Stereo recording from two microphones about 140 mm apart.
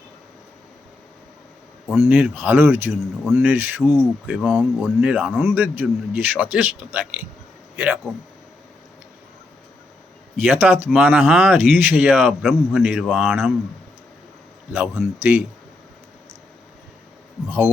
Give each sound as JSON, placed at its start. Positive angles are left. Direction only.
{"t": 2.0, "sound": "a man's voice", "side_deg": -10}
{"t": 8.1, "sound": "a man's voice", "side_deg": 0}
{"t": 10.4, "sound": "a man's voice", "side_deg": -10}
{"t": 14.8, "sound": "a man's voice", "side_deg": -10}